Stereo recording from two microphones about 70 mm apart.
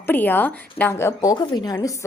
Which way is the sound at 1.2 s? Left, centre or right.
Left.